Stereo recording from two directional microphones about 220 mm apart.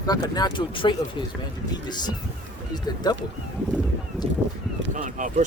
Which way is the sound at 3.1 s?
20° left (ahead or behind).